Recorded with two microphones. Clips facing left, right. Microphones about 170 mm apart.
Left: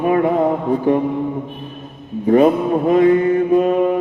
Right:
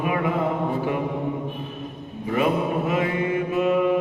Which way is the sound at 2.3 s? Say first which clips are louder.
Left 9 dB; 40° left (ahead or behind).